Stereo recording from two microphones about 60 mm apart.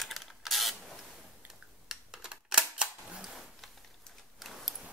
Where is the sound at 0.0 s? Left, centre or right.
Centre.